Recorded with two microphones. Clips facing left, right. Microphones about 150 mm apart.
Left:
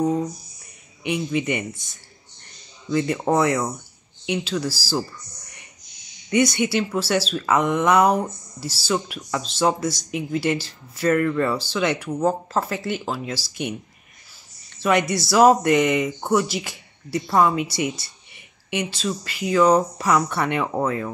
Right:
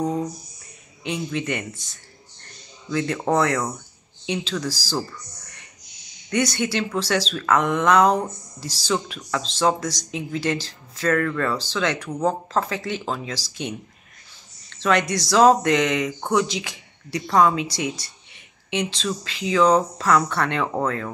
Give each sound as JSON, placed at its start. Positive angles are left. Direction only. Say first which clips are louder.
{"t": 1.0, "sound": "speech", "louder": "left 3 dB", "side_deg": 10}
{"t": 2.9, "sound": "speech", "louder": "left 1 dB", "side_deg": 10}
{"t": 6.3, "sound": "speech", "louder": "left 3 dB", "side_deg": 10}
{"t": 14.7, "sound": "speech", "louder": "left 1 dB", "side_deg": 10}